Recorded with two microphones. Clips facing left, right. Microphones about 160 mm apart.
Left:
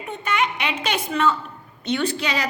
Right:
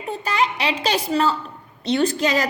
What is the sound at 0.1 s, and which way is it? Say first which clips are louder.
A woman's voice: right 2 dB; 35° right (ahead or behind).